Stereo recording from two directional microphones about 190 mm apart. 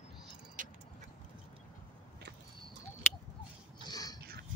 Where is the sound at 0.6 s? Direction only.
45° right (ahead or behind).